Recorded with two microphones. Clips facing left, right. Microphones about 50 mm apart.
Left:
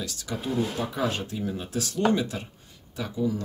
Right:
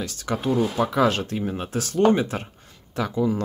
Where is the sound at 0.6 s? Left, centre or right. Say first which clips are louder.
Right 6 dB; right.